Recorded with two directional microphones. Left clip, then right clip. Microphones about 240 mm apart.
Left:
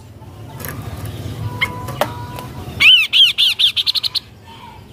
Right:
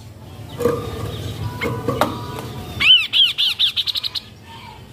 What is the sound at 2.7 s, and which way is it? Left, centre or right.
Bird, centre.